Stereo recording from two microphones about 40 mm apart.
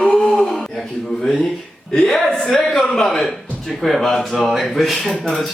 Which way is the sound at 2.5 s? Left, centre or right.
Centre.